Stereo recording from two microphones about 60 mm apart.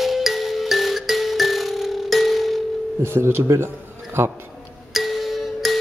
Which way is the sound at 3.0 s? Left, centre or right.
Right.